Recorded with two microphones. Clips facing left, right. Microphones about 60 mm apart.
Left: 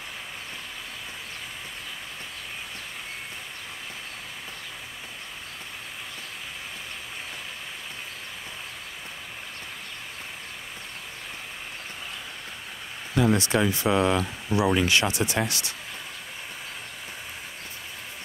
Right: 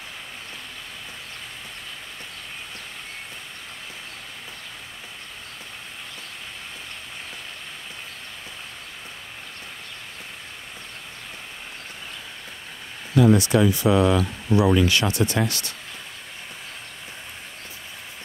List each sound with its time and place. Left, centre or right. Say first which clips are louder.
13.1 s speech: right 5 dB; centre
13.5 s speech: right 4 dB; left